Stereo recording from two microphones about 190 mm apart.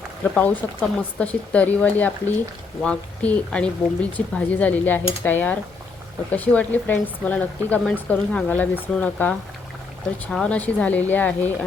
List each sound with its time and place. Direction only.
0.3 s speech: 10° left (ahead or behind)
10.3 s speech: 5° left (ahead or behind)